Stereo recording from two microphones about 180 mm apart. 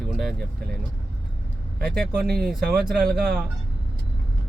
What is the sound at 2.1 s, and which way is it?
Speech, 60° right (ahead or behind).